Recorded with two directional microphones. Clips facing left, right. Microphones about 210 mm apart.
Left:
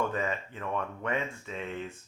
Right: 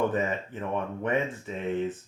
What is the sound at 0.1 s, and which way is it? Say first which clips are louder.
Speech: right 4 dB; 20° right (ahead or behind).